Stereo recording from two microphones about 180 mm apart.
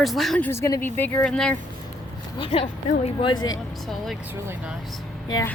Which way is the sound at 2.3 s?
30° left (ahead or behind).